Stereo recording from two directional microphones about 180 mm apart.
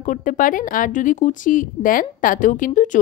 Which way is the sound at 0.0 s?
45° left (ahead or behind).